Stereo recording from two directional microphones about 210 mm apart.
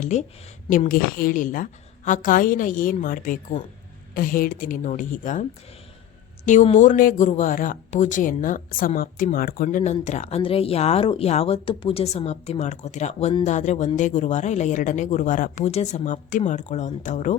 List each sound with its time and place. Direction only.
0.0 s speech: 35° left (ahead or behind)